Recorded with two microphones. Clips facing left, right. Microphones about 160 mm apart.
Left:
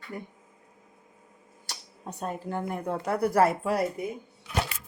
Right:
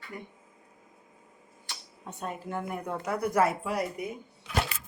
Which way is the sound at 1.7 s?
40° left (ahead or behind).